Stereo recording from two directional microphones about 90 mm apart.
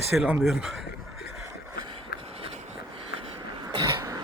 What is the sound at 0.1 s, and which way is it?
Speech, 15° right (ahead or behind).